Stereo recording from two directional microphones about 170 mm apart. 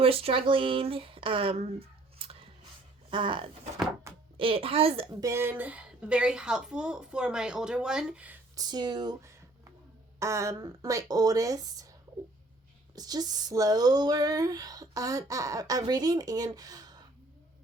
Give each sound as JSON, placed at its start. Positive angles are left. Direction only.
{"t": 0.0, "sound": "speech", "side_deg": -35}
{"t": 2.1, "sound": "a sound", "side_deg": -35}
{"t": 3.1, "sound": "speech", "side_deg": -30}
{"t": 5.2, "sound": "speech", "side_deg": -15}
{"t": 8.5, "sound": "speech", "side_deg": -25}
{"t": 13.0, "sound": "speech", "side_deg": -25}